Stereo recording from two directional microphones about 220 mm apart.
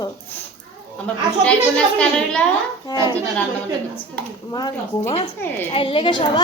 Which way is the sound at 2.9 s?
20° left (ahead or behind).